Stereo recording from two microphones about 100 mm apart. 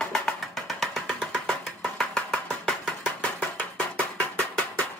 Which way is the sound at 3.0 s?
15° left (ahead or behind).